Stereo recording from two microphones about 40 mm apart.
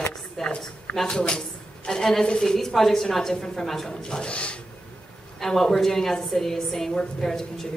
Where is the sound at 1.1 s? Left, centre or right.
Left.